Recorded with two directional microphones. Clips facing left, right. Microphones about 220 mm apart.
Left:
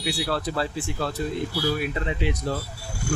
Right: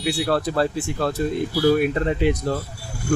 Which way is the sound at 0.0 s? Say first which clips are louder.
Right 5 dB; 50° right (ahead or behind).